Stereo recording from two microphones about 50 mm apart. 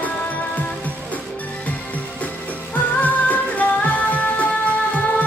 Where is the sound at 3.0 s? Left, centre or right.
Left.